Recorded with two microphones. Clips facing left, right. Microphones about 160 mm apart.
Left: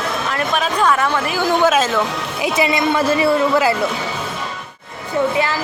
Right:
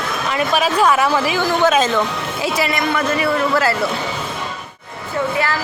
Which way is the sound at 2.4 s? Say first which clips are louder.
Left 3 dB; 20° left (ahead or behind).